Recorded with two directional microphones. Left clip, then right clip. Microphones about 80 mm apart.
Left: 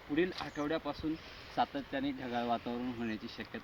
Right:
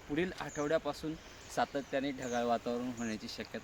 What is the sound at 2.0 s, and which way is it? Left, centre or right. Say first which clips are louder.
Speech: right 1 dB; right.